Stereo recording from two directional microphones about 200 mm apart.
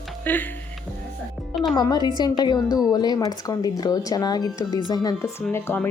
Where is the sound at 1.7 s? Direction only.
20° left (ahead or behind).